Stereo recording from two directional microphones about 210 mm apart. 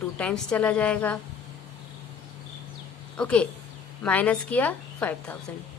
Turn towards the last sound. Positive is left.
turn(degrees=5)  # may be behind; listen again after turning